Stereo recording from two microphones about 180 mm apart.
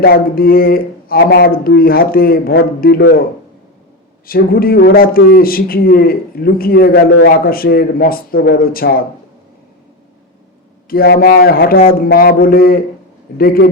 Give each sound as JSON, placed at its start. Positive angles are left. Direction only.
{"t": 0.0, "sound": "a man's voice", "side_deg": 55}
{"t": 4.3, "sound": "a man's voice", "side_deg": 55}
{"t": 10.8, "sound": "a man's voice", "side_deg": 55}